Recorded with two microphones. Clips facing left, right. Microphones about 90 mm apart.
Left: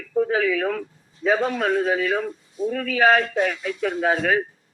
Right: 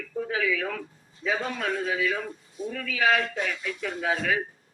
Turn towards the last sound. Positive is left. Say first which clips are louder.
# left 6 dB
turn(degrees=45)  # may be behind; listen again after turning